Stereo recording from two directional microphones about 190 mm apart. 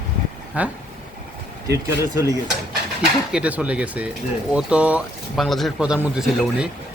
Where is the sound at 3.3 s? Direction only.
5° right (ahead or behind).